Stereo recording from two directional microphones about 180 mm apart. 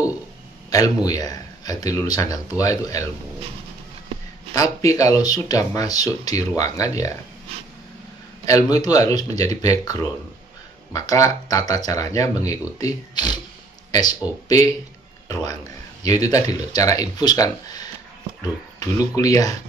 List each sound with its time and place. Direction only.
0.7 s speech: 20° left (ahead or behind)
4.6 s speech: 20° left (ahead or behind)
8.5 s speech: 20° left (ahead or behind)
15.2 s speech: 20° left (ahead or behind)